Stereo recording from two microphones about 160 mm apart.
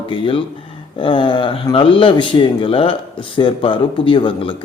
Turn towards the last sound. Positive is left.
turn(degrees=30)  # may be behind; listen again after turning